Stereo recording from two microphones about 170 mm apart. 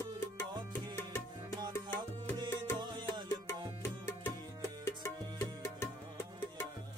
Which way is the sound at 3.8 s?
15° left (ahead or behind).